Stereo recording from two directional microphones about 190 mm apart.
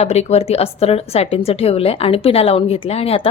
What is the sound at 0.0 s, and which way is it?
Speech, 35° left (ahead or behind).